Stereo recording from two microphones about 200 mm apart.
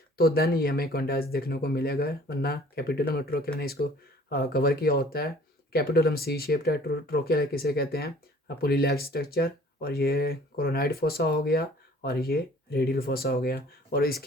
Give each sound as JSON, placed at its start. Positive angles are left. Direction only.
{"t": 0.2, "sound": "speech", "side_deg": 50}